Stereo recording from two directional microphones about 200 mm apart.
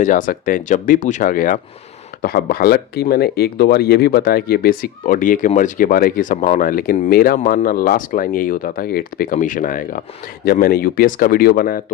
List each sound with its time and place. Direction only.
0.0 s speech: 40° left (ahead or behind)